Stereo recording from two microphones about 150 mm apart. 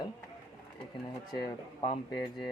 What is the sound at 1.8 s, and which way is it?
Speech, 35° left (ahead or behind).